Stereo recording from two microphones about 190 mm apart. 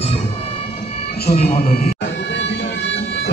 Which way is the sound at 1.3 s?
40° left (ahead or behind).